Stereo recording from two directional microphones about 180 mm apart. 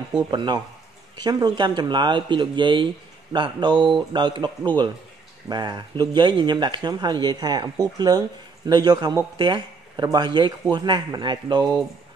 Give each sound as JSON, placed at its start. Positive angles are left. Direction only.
{"t": 0.3, "sound": "speech", "side_deg": -25}